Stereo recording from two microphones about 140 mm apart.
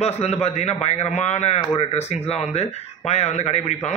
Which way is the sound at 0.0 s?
50° left (ahead or behind).